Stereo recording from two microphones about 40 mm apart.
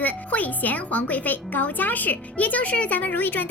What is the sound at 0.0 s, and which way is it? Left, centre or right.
Speech, left.